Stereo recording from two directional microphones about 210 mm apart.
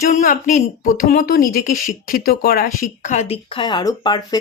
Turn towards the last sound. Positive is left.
turn(degrees=20)  # may be behind; listen again after turning